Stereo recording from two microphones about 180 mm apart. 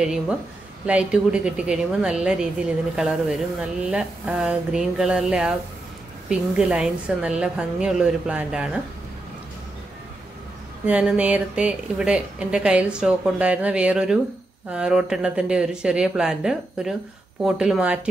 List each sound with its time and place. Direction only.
0.8 s a woman's voice: 5° right (ahead or behind)
10.9 s a woman's voice: 5° right (ahead or behind)